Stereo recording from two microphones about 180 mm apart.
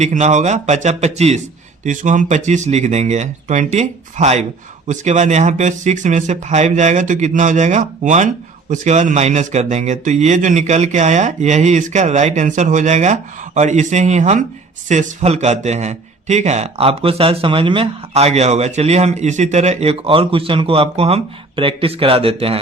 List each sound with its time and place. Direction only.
0.0 s a man's voice: 40° right (ahead or behind)